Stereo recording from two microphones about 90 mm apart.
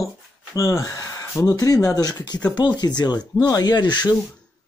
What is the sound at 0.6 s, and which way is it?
Speech, 35° left (ahead or behind).